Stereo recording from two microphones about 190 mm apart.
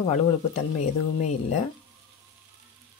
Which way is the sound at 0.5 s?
35° left (ahead or behind).